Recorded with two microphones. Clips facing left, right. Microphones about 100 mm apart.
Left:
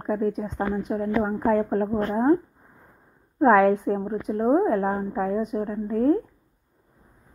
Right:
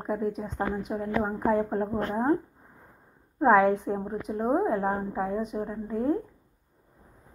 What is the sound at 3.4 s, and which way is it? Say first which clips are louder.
Speech: left 3 dB; centre (ahead or behind).